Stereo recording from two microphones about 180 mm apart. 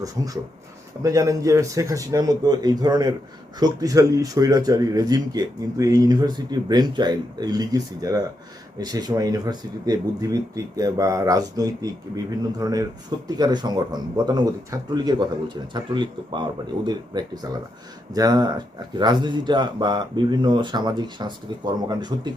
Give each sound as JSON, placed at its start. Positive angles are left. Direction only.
{"t": 0.2, "sound": "speech", "side_deg": -20}